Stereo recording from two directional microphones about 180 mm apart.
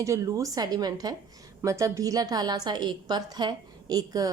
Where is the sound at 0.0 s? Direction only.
15° right (ahead or behind).